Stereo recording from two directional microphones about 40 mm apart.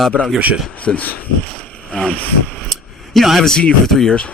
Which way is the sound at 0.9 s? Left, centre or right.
Centre.